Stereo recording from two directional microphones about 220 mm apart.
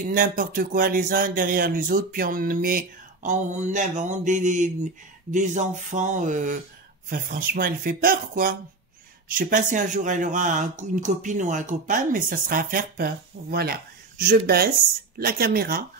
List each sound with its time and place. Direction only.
0.0 s speech: 40° right (ahead or behind)